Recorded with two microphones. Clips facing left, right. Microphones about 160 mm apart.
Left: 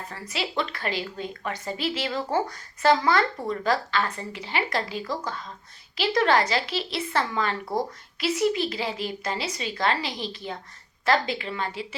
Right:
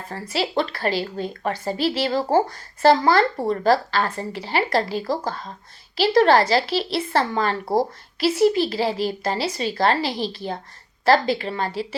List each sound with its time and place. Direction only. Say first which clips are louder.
0.1 s speech: right 9 dB; 35° right (ahead or behind)